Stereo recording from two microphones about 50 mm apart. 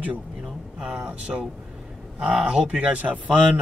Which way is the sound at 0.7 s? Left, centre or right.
Centre.